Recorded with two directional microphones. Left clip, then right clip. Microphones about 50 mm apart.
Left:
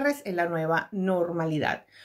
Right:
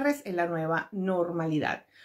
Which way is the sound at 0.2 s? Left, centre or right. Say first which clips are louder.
Left 2 dB; left.